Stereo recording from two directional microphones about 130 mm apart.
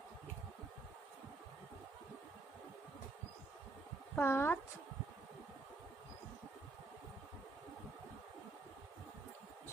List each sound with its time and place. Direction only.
4.1 s speech: 20° left (ahead or behind)